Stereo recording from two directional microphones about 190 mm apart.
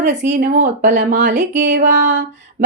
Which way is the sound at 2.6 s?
45° right (ahead or behind).